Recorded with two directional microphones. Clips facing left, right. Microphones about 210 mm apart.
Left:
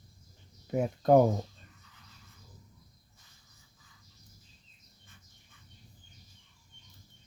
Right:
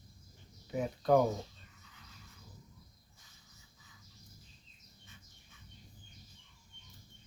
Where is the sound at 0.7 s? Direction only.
45° left (ahead or behind).